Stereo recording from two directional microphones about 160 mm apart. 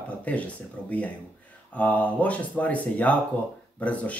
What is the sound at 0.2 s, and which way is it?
Speech, 10° left (ahead or behind).